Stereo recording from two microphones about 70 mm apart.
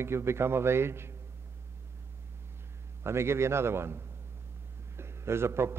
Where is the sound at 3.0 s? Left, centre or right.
Right.